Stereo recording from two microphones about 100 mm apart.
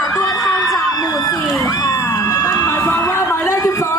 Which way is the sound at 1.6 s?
35° left (ahead or behind).